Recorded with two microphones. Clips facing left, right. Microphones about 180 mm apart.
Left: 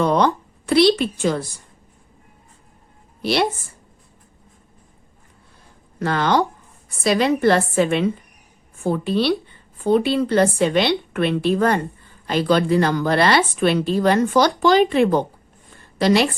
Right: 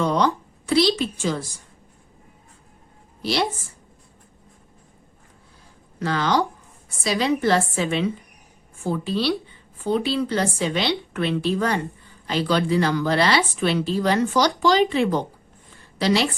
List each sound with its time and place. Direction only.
0.0 s a woman's voice: 60° left (ahead or behind)
3.2 s a woman's voice: 60° left (ahead or behind)
6.0 s a woman's voice: 55° left (ahead or behind)